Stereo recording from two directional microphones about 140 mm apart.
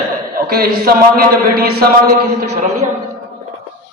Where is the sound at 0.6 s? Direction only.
90° right.